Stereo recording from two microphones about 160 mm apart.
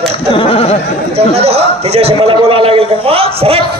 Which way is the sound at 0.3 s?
35° left (ahead or behind).